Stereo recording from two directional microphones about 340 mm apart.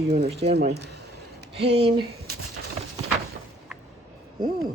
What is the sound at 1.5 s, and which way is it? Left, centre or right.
Speech, centre.